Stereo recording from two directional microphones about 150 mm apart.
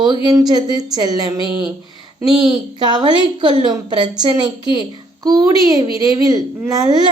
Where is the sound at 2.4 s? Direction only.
30° right (ahead or behind).